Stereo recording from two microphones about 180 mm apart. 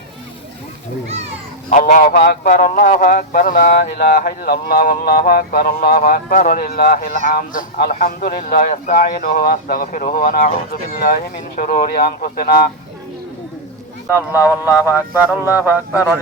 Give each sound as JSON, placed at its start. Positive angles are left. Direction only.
{"t": 1.7, "sound": "a man's voice", "side_deg": 50}
{"t": 14.1, "sound": "speech", "side_deg": 15}